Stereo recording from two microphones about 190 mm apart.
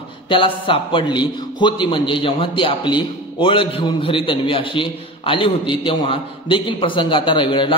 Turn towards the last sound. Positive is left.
turn(degrees=25)  # may be behind; listen again after turning